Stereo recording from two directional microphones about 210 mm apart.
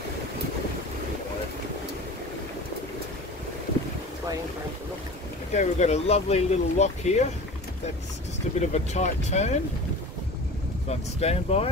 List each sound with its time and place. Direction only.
5.5 s speech: 35° left (ahead or behind)
8.5 s speech: 35° left (ahead or behind)
10.9 s speech: 30° left (ahead or behind)